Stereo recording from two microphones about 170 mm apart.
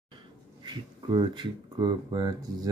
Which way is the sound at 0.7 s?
25° right (ahead or behind).